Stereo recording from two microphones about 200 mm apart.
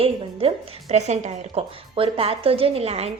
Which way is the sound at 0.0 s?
30° right (ahead or behind).